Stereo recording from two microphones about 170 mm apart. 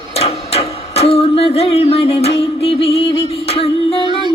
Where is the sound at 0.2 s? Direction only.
40° left (ahead or behind).